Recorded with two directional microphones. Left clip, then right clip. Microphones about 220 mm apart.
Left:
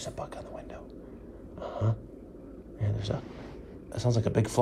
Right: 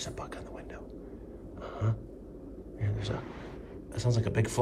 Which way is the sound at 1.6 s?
10° left (ahead or behind).